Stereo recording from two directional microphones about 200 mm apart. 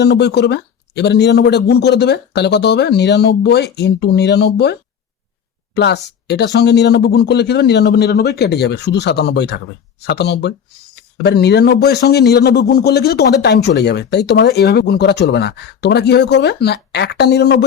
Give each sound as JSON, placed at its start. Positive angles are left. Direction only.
{"t": 0.0, "sound": "a man's voice", "side_deg": 55}